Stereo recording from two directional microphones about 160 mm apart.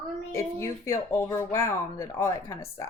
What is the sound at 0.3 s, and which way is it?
A woman's voice, 20° left (ahead or behind).